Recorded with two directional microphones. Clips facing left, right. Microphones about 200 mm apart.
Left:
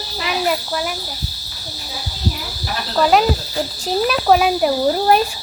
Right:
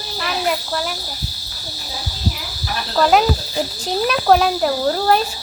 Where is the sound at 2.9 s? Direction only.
5° left (ahead or behind).